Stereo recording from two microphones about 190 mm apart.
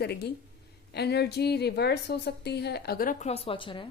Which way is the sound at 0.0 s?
60° left (ahead or behind).